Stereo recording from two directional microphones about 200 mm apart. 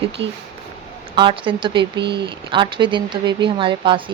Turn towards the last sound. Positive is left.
turn(degrees=-25)  # may be behind; listen again after turning